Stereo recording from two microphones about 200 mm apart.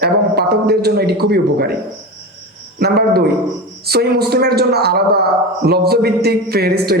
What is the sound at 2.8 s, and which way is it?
A woman's voice, 50° right (ahead or behind).